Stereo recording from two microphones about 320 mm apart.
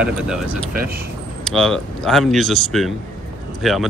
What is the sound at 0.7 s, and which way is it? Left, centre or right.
Speech, right.